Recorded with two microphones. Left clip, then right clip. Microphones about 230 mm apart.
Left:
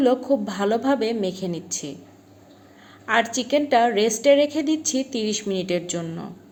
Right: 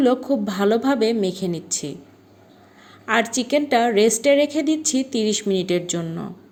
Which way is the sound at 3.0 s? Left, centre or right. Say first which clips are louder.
Right 1 dB; right.